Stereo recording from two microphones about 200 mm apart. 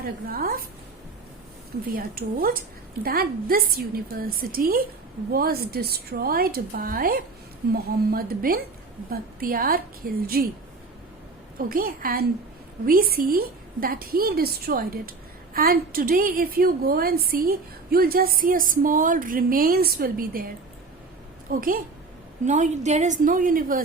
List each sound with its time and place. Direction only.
0.0 s speech: 50° right (ahead or behind)
1.9 s speech: 50° right (ahead or behind)
11.5 s speech: 45° right (ahead or behind)
21.5 s a woman's voice: 45° right (ahead or behind)